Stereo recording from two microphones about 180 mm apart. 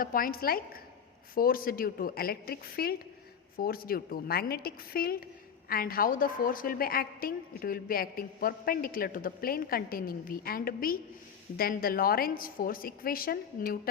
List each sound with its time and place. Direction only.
0.0 s a woman's voice: 50° left (ahead or behind)